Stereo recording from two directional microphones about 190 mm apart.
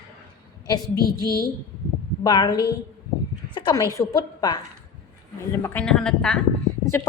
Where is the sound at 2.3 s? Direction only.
20° left (ahead or behind).